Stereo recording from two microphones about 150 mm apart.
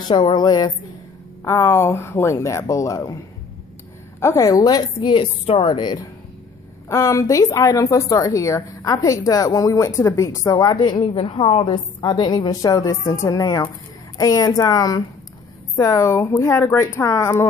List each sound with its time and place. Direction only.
0.1 s speech: 30° left (ahead or behind)
1.4 s speech: 15° left (ahead or behind)
4.2 s speech: 20° left (ahead or behind)
6.9 s speech: 20° left (ahead or behind)